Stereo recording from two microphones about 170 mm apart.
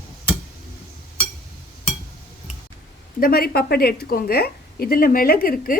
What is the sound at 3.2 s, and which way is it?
A woman's voice, 65° left (ahead or behind).